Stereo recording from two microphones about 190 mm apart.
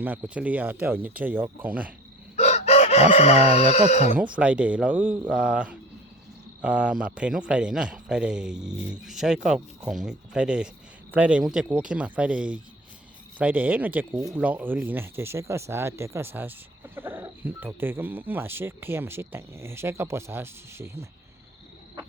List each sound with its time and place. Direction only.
0.0 s speech: 10° right (ahead or behind)
2.3 s chicken: 35° left (ahead or behind)
4.4 s a man's voice: 5° right (ahead or behind)